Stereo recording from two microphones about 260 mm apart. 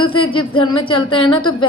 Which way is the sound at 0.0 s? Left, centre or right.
Centre.